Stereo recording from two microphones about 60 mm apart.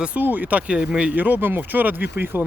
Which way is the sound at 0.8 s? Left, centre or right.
Centre.